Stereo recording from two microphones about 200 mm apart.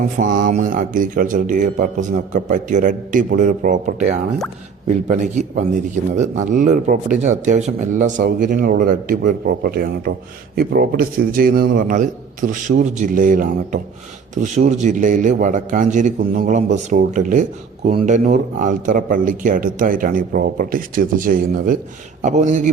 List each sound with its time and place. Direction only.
0.2 s a man's voice: 40° right (ahead or behind)